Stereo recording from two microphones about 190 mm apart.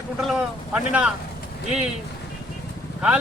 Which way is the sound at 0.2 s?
5° right (ahead or behind).